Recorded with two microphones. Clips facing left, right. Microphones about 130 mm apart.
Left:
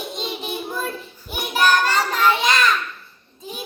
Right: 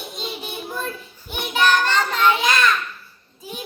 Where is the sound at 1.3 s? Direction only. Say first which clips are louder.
Left 1 dB; 5° left (ahead or behind).